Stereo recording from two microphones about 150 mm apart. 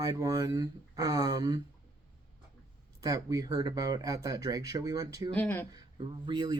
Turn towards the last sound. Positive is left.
turn(degrees=-30)  # may be behind; listen again after turning